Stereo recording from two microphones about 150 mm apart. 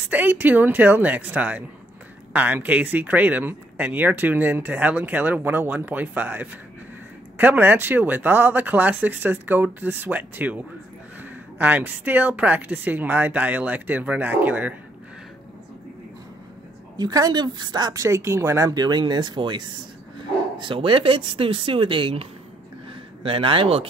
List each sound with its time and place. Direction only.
0.1 s speech: 10° right (ahead or behind)
16.9 s a woman's voice: 25° right (ahead or behind)